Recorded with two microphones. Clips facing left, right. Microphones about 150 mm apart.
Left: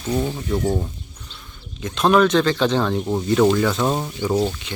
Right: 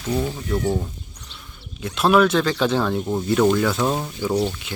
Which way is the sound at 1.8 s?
5° right (ahead or behind).